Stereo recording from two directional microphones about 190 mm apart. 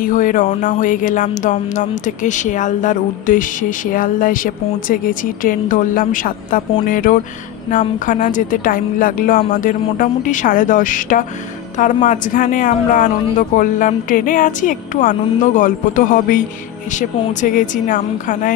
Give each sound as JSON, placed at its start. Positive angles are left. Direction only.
{"t": 0.0, "sound": "speech", "side_deg": 45}